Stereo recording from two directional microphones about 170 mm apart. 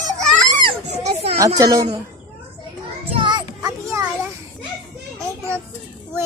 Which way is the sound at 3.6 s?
15° right (ahead or behind).